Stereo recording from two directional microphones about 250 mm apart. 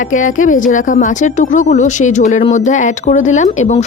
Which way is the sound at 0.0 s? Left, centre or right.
Left.